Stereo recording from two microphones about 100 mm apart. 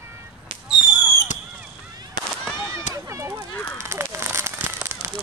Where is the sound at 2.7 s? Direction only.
30° right (ahead or behind).